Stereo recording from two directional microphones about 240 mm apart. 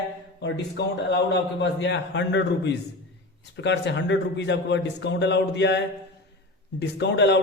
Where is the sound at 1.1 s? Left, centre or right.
Left.